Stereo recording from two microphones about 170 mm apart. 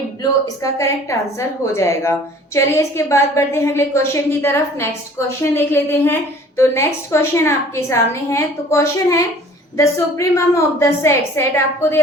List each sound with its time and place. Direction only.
0.2 s a woman's voice: 20° left (ahead or behind)